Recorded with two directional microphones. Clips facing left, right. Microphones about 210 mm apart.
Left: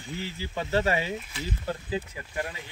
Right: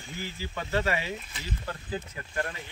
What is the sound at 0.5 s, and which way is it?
Speech, 30° left (ahead or behind).